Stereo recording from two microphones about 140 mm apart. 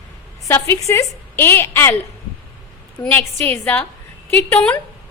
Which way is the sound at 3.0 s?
15° left (ahead or behind).